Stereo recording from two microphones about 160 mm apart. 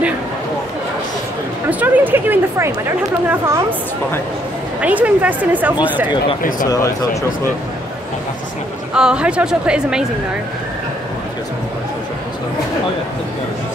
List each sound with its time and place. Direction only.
1.7 s a sound: 10° right (ahead or behind)
3.3 s a woman's voice: 15° right (ahead or behind)
4.8 s a woman's voice: 10° right (ahead or behind)
6.6 s speech: 20° left (ahead or behind)
8.9 s a woman's voice: 5° right (ahead or behind)